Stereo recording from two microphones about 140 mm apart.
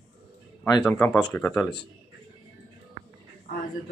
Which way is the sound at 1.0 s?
15° left (ahead or behind).